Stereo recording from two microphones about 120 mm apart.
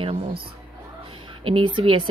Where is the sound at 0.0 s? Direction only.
55° right (ahead or behind).